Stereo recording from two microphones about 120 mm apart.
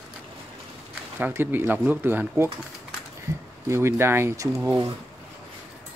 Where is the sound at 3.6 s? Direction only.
20° right (ahead or behind).